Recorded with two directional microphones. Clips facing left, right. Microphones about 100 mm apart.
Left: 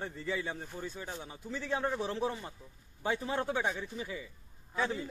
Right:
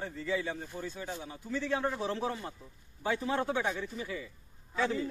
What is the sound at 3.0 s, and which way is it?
A man's voice, 20° left (ahead or behind).